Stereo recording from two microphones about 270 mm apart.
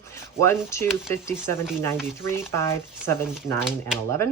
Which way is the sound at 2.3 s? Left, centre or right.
Centre.